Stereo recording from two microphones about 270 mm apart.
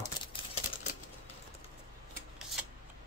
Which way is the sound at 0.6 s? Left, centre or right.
Left.